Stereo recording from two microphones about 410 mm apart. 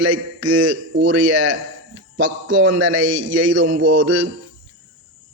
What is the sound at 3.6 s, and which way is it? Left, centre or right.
Speech, centre.